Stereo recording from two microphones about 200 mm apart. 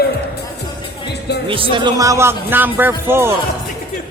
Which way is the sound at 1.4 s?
25° right (ahead or behind).